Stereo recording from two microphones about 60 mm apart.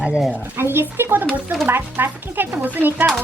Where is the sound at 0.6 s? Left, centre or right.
Right.